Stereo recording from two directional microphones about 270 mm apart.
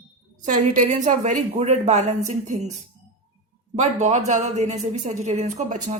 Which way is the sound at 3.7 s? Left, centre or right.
Right.